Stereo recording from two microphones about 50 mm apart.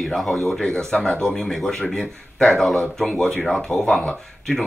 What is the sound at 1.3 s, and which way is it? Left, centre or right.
Speech, centre.